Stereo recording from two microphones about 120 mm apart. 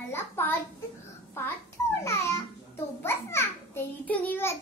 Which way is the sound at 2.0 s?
25° left (ahead or behind).